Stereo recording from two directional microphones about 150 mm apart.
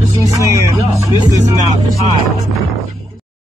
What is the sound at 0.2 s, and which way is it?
Music, 20° right (ahead or behind).